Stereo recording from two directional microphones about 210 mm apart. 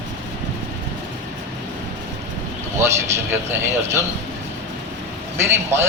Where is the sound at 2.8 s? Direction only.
10° right (ahead or behind).